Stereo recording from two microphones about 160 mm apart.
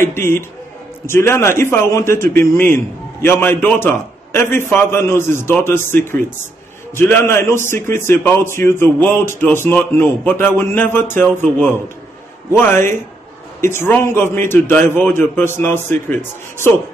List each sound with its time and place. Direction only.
0.0 s a man's voice: 15° left (ahead or behind)
12.5 s a man's voice: 15° left (ahead or behind)